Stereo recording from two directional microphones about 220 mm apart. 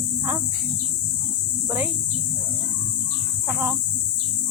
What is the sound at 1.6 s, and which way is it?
Speech, 10° right (ahead or behind).